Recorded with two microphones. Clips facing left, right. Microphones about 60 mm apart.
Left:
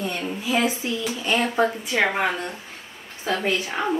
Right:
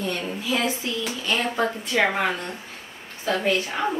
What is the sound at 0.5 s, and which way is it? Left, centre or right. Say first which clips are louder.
A woman's voice: left 3 dB; left.